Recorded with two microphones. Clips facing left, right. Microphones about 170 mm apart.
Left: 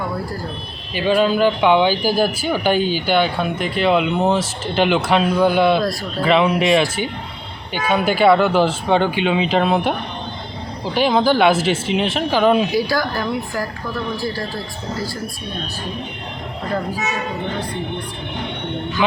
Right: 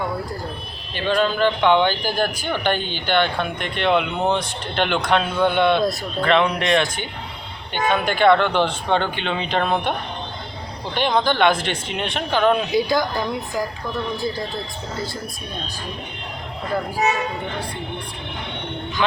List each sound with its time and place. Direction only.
0.9 s speech: 10° left (ahead or behind)
10.9 s speech: 5° left (ahead or behind)
12.7 s a woman's voice: 20° right (ahead or behind)